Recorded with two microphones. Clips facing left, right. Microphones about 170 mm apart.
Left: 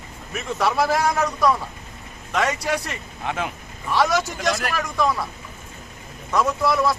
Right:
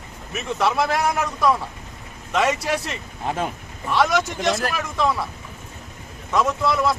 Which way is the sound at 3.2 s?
35° right (ahead or behind).